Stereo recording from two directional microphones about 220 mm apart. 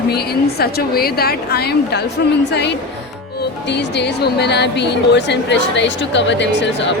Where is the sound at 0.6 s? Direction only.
45° left (ahead or behind).